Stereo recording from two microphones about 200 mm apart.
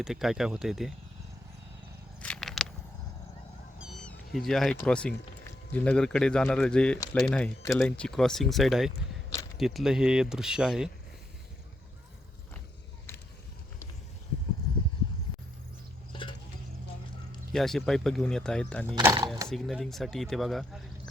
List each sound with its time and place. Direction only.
0.0 s speech: centre (ahead or behind)
2.2 s a sound: 5° left (ahead or behind)
3.8 s cat: centre (ahead or behind)
4.8 s speech: 5° left (ahead or behind)
17.5 s speech: centre (ahead or behind)
19.0 s speech: 20° right (ahead or behind)
19.5 s speech: centre (ahead or behind)